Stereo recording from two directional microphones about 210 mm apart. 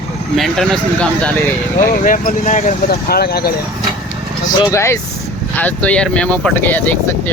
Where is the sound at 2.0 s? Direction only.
40° left (ahead or behind).